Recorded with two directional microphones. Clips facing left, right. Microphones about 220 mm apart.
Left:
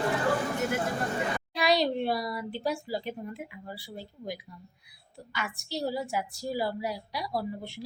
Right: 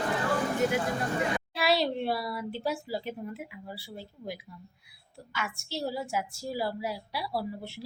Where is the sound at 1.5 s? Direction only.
Centre (ahead or behind).